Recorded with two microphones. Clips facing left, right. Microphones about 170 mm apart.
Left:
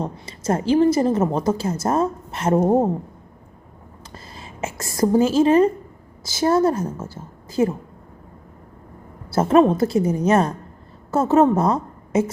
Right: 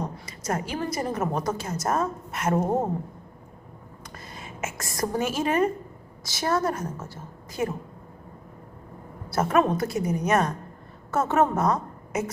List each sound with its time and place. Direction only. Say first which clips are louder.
0.0 s a woman's voice: left 6 dB; 30° left (ahead or behind)
4.1 s a sound: left 1 dB; 30° left (ahead or behind)
6.2 s a woman's voice: left 8 dB; 25° left (ahead or behind)
9.3 s a woman's voice: left 7 dB; 30° left (ahead or behind)